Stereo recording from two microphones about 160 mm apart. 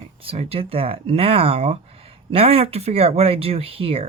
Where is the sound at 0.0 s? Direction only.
35° right (ahead or behind).